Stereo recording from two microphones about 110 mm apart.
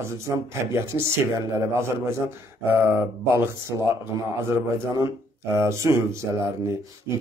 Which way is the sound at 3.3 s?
25° right (ahead or behind).